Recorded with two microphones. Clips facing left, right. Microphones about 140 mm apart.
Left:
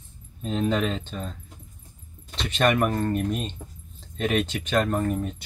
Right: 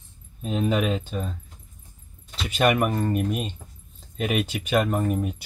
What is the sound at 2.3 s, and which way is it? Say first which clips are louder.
Speech: right 1 dB; 10° right (ahead or behind).